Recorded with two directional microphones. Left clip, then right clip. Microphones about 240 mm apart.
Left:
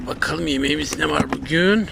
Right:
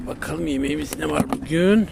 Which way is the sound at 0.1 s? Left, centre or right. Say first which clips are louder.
Left 5 dB; centre.